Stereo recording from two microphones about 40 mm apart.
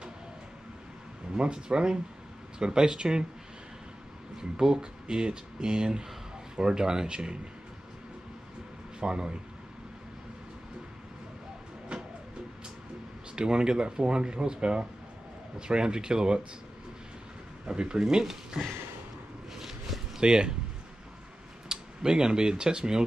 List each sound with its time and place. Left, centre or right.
1.3 s speech: right
4.4 s speech: centre
9.0 s speech: right
13.4 s speech: right
17.6 s speech: right
20.2 s speech: centre
21.6 s speech: centre